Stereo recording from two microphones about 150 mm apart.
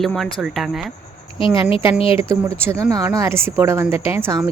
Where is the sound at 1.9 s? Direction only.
40° left (ahead or behind).